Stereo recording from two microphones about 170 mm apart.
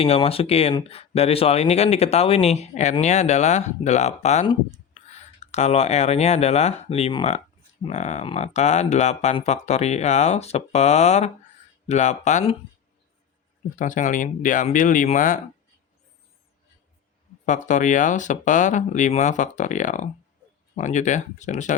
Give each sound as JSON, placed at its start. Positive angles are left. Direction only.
{"t": 0.0, "sound": "speech", "side_deg": 35}
{"t": 13.7, "sound": "speech", "side_deg": 50}
{"t": 17.4, "sound": "speech", "side_deg": 45}